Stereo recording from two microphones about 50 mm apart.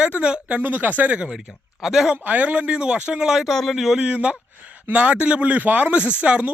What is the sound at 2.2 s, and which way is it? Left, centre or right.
Speech, right.